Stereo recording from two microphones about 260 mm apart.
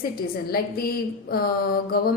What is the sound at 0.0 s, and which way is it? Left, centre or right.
A woman's voice, left.